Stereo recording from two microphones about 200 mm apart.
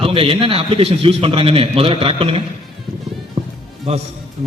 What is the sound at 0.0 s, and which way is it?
A man's voice, 25° right (ahead or behind).